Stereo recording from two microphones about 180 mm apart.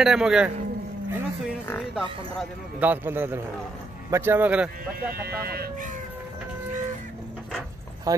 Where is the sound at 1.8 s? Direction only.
Centre (ahead or behind).